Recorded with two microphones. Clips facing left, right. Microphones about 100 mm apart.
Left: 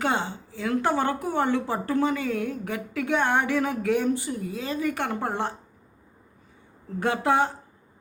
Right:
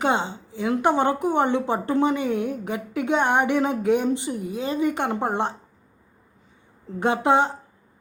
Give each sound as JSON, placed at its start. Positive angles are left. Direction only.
{"t": 0.0, "sound": "a woman's voice", "side_deg": -20}
{"t": 6.8, "sound": "a woman's voice", "side_deg": -20}